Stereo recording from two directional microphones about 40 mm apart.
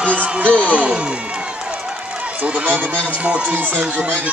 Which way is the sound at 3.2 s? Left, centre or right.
Right.